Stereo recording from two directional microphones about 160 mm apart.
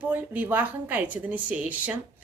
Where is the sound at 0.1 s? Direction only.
10° right (ahead or behind).